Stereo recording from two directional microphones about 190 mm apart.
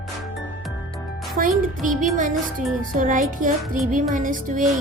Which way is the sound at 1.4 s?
45° right (ahead or behind).